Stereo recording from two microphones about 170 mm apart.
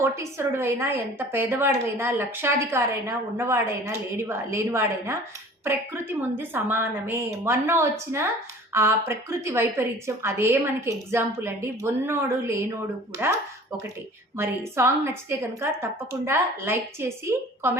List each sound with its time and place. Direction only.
0.0 s a woman's voice: 15° right (ahead or behind)